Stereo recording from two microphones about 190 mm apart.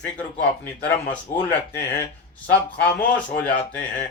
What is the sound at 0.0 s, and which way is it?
Speech, 5° left (ahead or behind).